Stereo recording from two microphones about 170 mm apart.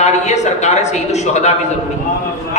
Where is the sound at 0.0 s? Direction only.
40° left (ahead or behind).